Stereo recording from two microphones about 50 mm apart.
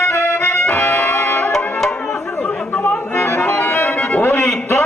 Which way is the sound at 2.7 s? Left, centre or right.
Left.